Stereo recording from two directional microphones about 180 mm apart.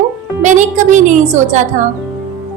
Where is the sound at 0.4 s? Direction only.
45° right (ahead or behind).